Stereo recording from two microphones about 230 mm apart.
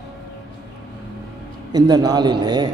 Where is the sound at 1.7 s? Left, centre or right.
Centre.